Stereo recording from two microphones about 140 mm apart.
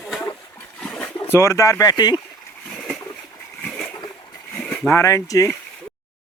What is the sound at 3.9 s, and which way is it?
Splash, 30° left (ahead or behind).